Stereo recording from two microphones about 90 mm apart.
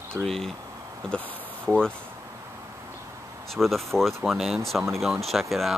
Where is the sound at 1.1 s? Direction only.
20° right (ahead or behind).